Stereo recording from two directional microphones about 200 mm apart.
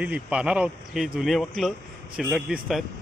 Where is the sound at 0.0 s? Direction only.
5° right (ahead or behind).